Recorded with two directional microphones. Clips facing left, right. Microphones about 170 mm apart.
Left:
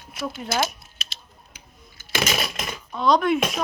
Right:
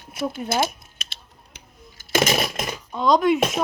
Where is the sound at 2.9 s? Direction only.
20° right (ahead or behind).